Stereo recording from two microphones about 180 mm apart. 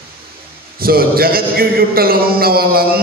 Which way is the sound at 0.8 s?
55° right (ahead or behind).